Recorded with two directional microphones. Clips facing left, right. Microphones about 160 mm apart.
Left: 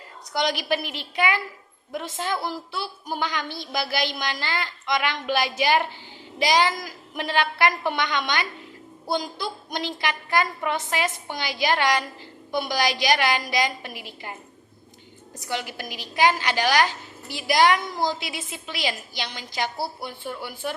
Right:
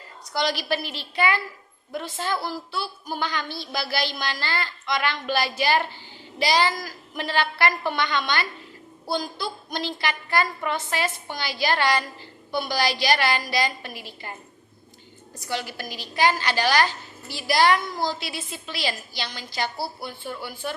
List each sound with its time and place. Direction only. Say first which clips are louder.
0.3 s a woman's voice: left 1 dB; 15° left (ahead or behind)
15.4 s a woman's voice: even; 15° left (ahead or behind)